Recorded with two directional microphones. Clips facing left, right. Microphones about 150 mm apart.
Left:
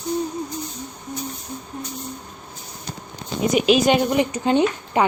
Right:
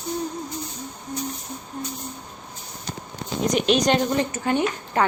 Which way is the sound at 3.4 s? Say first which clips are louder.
Left 3 dB; 5° left (ahead or behind).